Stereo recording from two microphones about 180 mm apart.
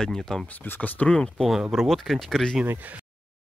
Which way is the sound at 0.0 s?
5° left (ahead or behind).